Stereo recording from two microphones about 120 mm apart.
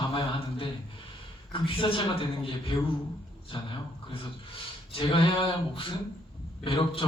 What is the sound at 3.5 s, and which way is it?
A man's voice, 45° left (ahead or behind).